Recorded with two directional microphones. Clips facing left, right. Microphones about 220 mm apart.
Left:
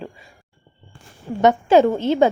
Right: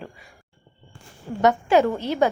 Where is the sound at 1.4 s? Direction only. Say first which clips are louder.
Left 4 dB; 20° left (ahead or behind).